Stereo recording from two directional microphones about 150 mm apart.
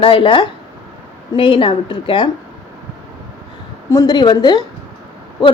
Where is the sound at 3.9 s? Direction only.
25° left (ahead or behind).